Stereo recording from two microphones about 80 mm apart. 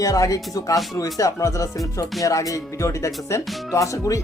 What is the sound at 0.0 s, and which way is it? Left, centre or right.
Speech, left.